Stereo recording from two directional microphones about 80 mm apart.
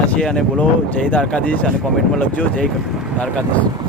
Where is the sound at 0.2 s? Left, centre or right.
Centre.